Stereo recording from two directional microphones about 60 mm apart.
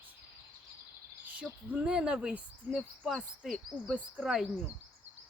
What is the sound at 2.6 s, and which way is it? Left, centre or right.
Speech, right.